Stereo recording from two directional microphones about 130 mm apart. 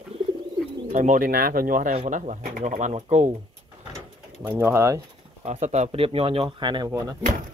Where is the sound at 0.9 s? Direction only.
90° right; by 3.4 s 65° right (ahead or behind).